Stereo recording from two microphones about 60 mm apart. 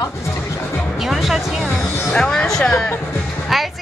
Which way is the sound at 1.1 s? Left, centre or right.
Centre.